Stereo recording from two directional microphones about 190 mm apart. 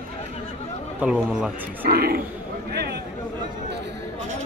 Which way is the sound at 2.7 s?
60° right (ahead or behind).